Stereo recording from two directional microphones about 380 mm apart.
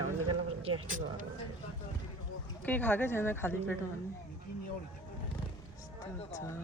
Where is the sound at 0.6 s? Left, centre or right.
Centre.